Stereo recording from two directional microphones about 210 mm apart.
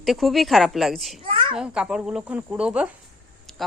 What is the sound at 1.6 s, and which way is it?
Speech, 5° right (ahead or behind).